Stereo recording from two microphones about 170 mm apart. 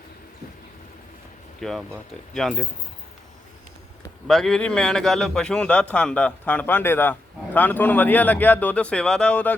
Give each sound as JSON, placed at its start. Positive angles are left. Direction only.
{"t": 1.6, "sound": "a man's voice", "side_deg": 0}
{"t": 4.3, "sound": "a man's voice", "side_deg": 0}